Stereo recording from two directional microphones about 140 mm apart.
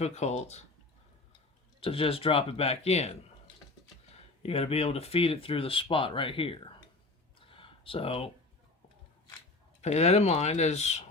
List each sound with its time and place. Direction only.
0.0 s speech: 50° left (ahead or behind)
1.8 s speech: 40° left (ahead or behind)
4.4 s speech: 45° left (ahead or behind)
7.5 s a sound: 40° left (ahead or behind)
9.8 s speech: 50° left (ahead or behind)